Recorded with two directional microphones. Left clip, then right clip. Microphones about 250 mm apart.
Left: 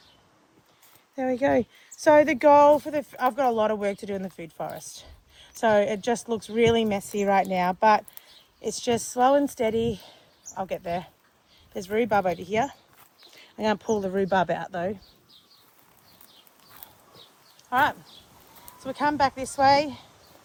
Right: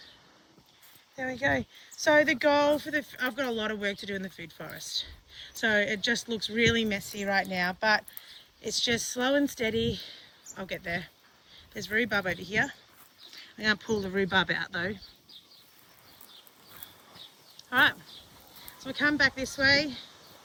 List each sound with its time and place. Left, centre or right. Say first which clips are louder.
1.1 s speech: left 6 dB; left
1.8 s speech: left 5 dB; left
5.7 s speech: left 3 dB; centre
6.5 s speech: left 5 dB; left
6.9 s speech: left 6 dB; centre
11.9 s speech: left 5 dB; left
12.3 s speech: left 3 dB; centre
17.7 s speech: left 1 dB; centre